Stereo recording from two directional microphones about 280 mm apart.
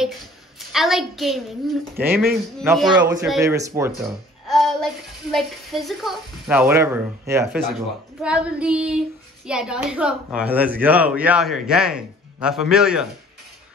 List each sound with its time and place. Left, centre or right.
0.6 s a man's voice: centre
4.5 s speech: centre